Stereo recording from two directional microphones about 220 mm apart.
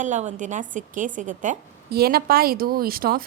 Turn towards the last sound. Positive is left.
turn(degrees=-40)  # may be behind; listen again after turning